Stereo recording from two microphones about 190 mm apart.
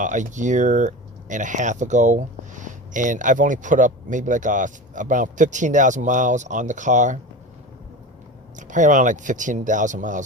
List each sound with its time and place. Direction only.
0.0 s speech: 40° right (ahead or behind)
8.5 s speech: 40° right (ahead or behind)